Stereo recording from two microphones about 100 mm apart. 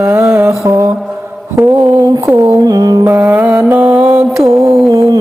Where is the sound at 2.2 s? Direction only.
30° right (ahead or behind).